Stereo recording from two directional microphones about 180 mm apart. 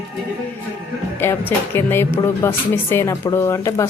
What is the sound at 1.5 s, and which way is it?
Speech, 10° left (ahead or behind).